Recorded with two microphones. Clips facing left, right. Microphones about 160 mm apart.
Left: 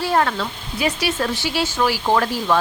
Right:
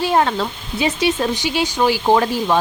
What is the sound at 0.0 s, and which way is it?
Speech, 15° right (ahead or behind).